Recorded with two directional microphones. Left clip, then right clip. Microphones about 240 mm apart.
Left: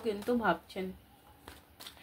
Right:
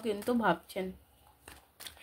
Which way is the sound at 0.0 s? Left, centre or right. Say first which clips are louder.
Right 1 dB; right.